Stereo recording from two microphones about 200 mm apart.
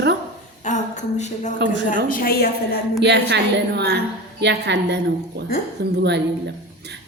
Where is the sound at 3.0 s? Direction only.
55° right (ahead or behind).